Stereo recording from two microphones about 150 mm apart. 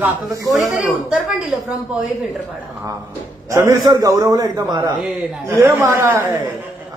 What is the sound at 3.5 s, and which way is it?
A man's voice, 20° right (ahead or behind).